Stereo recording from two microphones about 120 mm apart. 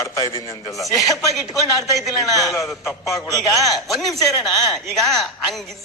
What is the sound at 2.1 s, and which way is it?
A man's voice, 30° left (ahead or behind).